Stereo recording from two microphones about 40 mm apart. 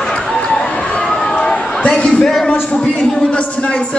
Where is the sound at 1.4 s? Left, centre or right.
Left.